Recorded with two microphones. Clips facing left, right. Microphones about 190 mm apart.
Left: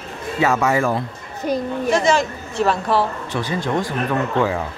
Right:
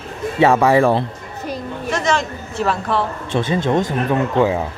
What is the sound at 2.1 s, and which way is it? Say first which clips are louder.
Speech: left 2 dB; 5° left (ahead or behind).